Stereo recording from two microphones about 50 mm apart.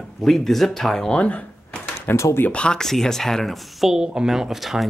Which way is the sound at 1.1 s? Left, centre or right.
Left.